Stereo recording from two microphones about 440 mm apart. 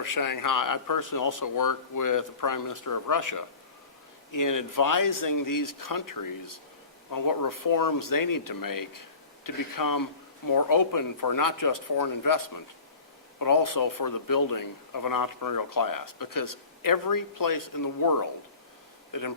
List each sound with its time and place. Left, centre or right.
0.0 s a man's voice: left